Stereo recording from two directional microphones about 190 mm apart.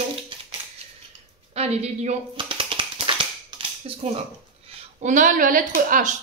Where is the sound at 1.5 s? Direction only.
35° right (ahead or behind).